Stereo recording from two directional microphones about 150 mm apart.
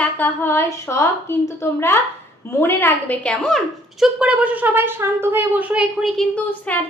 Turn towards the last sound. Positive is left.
turn(degrees=10)  # may be behind; listen again after turning